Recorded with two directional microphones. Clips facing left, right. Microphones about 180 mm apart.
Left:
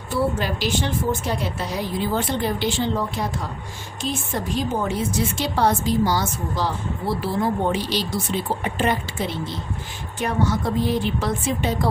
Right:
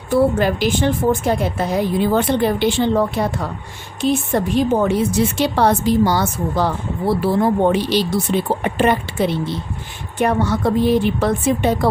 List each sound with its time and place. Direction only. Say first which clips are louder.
0.3 s a woman's voice: right 7 dB; 55° right (ahead or behind)